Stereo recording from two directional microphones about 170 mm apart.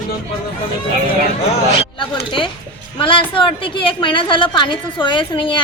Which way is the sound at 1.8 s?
30° left (ahead or behind).